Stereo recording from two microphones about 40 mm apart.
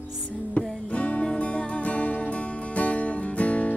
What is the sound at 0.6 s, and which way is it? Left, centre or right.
Music, left.